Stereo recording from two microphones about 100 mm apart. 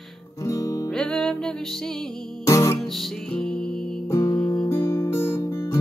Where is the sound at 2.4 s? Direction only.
30° left (ahead or behind).